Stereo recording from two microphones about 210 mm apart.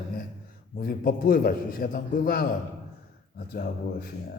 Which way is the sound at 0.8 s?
45° left (ahead or behind).